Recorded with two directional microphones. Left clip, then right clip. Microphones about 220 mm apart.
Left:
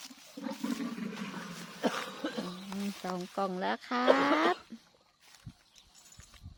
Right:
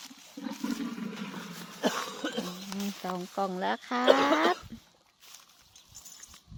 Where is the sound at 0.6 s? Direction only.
20° left (ahead or behind).